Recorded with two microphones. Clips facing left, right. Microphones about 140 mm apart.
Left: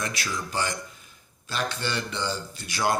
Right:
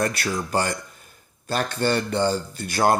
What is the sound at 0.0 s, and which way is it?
Speech, 55° right (ahead or behind).